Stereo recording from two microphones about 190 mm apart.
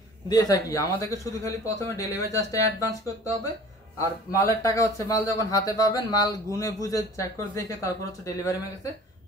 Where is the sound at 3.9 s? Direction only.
15° left (ahead or behind).